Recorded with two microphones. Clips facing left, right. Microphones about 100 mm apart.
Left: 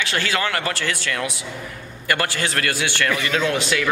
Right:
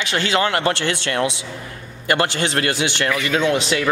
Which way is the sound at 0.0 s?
20° right (ahead or behind).